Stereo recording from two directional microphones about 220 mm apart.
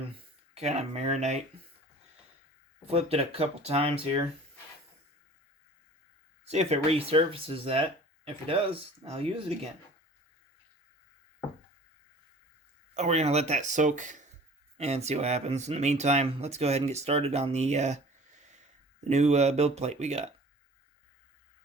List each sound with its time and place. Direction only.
0.5 s speech: 30° right (ahead or behind)
2.8 s speech: 25° right (ahead or behind)
6.4 s speech: 30° right (ahead or behind)
12.9 s speech: 30° right (ahead or behind)
19.0 s speech: 30° right (ahead or behind)